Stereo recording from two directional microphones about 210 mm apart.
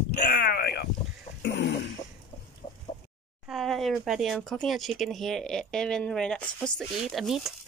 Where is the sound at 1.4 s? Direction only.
60° left (ahead or behind).